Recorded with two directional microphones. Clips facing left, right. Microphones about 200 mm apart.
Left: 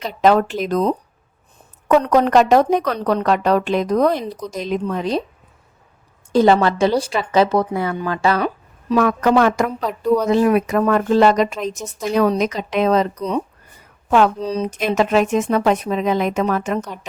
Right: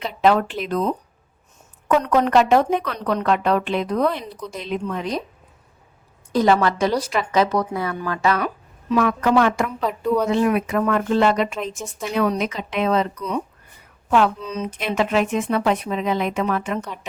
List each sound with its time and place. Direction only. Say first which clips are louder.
0.0 s a woman's voice: left 3 dB; 40° left (ahead or behind)
6.3 s a woman's voice: left 4 dB; 30° left (ahead or behind)
8.9 s a woman's voice: left 3 dB; 40° left (ahead or behind)